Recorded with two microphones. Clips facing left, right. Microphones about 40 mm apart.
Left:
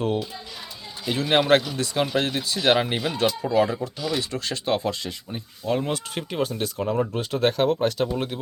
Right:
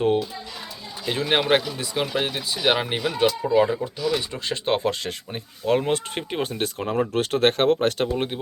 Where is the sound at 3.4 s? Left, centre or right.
Centre.